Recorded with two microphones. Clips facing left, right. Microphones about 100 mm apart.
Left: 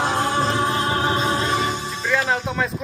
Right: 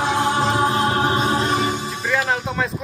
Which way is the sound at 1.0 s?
10° right (ahead or behind).